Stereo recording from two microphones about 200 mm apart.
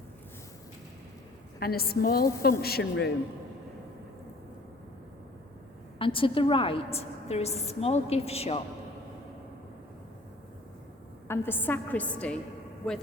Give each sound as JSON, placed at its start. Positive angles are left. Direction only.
{"t": 1.5, "sound": "speech", "side_deg": 50}
{"t": 6.0, "sound": "a woman's voice", "side_deg": 25}
{"t": 11.3, "sound": "a woman's voice", "side_deg": 10}